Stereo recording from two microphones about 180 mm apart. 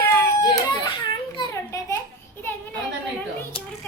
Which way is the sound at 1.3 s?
15° left (ahead or behind).